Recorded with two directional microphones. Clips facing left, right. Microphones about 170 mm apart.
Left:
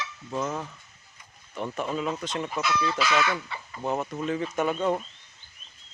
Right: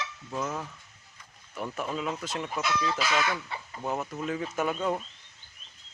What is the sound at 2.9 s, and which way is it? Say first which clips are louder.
Speech: left 3 dB; 45° right (ahead or behind).